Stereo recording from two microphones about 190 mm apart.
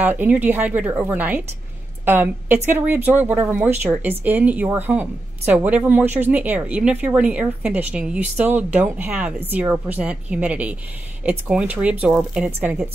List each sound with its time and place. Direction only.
0.0 s speech: 10° right (ahead or behind)